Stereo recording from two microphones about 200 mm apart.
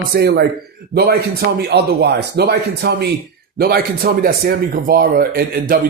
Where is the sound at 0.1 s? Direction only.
55° right (ahead or behind).